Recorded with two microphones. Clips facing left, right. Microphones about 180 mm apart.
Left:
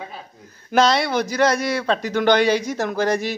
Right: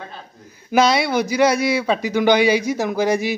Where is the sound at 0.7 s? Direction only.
10° right (ahead or behind).